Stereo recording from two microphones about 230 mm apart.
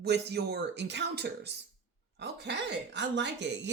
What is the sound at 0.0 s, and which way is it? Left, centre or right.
Speech, right.